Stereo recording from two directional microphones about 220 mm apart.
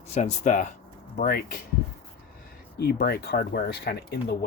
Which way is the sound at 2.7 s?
45° left (ahead or behind).